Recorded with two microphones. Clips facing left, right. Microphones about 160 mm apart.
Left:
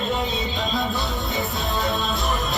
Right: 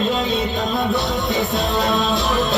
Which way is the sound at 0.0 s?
90° right.